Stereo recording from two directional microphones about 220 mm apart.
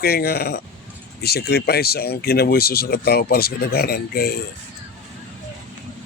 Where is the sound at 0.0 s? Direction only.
45° left (ahead or behind).